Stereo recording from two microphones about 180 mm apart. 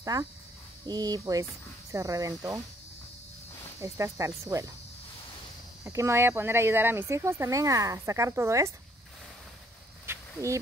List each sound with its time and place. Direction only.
0.0 s speech: 20° right (ahead or behind)
3.8 s speech: 15° right (ahead or behind)
5.9 s speech: 15° right (ahead or behind)
10.0 s a sound: 15° right (ahead or behind)